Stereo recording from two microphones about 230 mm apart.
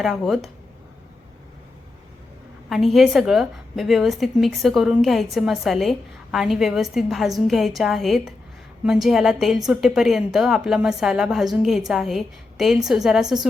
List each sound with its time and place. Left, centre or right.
0.0 s a woman's voice: centre
2.6 s a woman's voice: centre